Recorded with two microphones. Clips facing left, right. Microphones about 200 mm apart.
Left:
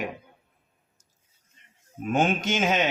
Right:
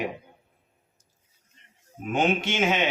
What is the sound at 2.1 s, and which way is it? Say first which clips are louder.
Speech: even; 45° left (ahead or behind).